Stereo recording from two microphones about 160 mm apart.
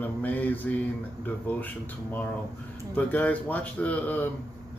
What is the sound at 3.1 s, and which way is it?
Speech, 10° left (ahead or behind).